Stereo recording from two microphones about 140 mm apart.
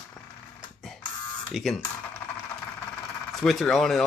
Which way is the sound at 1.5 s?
Centre (ahead or behind).